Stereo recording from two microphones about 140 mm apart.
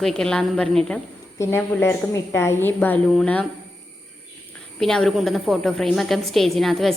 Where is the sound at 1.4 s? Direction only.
15° left (ahead or behind).